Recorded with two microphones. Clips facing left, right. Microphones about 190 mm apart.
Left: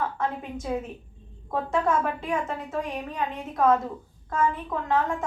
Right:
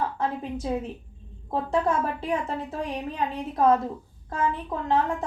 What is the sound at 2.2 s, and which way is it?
A woman's voice, 35° right (ahead or behind).